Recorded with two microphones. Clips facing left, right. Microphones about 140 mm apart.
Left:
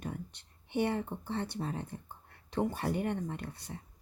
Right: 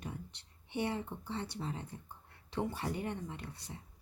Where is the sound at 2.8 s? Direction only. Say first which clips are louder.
Left 5 dB; 60° left (ahead or behind).